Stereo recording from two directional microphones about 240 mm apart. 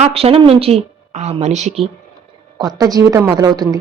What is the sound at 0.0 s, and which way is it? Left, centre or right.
A woman's voice, right.